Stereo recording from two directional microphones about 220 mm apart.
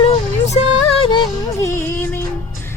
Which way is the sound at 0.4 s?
25° left (ahead or behind).